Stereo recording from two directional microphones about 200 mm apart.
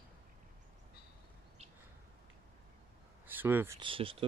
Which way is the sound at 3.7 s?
25° right (ahead or behind).